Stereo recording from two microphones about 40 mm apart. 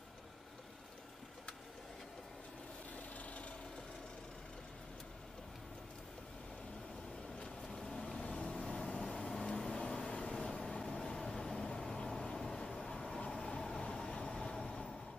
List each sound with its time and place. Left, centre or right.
3.2 s vehicle: left
7.7 s vehicle: centre
10.3 s vehicle: centre
12.6 s vehicle: left